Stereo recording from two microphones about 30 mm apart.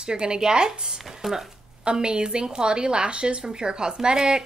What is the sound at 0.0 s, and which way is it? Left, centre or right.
Speech, right.